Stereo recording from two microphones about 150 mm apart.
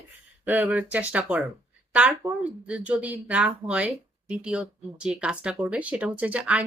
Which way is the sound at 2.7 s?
10° right (ahead or behind).